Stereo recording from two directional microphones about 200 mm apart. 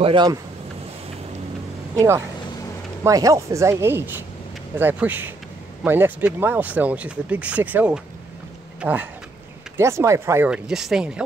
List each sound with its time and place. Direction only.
0.0 s speech: 25° right (ahead or behind)
2.0 s speech: 15° right (ahead or behind)